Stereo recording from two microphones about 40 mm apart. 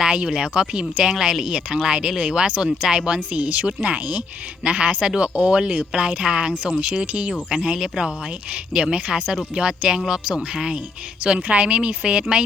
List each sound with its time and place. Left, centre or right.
0.0 s a sound: right
0.3 s speech: centre
1.0 s speech: centre
3.2 s speech: right; by 9.0 s centre
9.0 s speech: right